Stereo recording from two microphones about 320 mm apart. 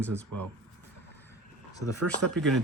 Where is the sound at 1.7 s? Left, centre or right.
Centre.